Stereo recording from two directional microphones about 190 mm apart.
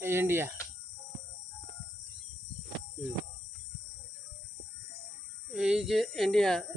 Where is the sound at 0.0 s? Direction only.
10° right (ahead or behind).